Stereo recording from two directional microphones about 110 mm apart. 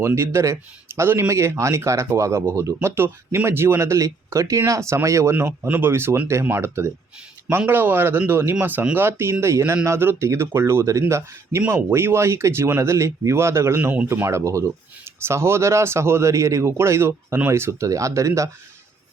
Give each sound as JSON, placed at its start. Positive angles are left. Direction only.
{"t": 0.0, "sound": "speech", "side_deg": -25}